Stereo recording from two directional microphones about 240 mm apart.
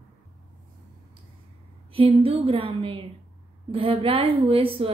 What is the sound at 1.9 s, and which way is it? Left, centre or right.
A woman's voice, right.